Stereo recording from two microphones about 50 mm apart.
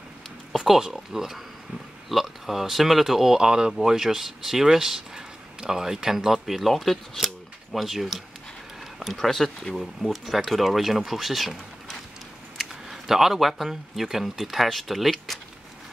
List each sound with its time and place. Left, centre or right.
0.6 s speech: centre